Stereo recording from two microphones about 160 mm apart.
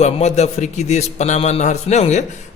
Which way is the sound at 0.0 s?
45° left (ahead or behind).